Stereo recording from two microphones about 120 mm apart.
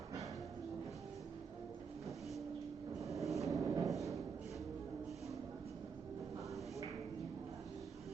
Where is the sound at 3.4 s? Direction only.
25° right (ahead or behind).